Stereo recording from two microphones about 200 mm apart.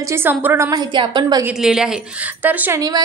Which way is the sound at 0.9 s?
25° right (ahead or behind).